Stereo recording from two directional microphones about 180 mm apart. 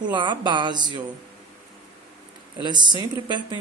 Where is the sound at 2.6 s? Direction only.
25° right (ahead or behind).